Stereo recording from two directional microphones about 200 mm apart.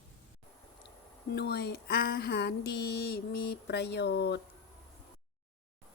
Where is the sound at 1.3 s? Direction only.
55° left (ahead or behind).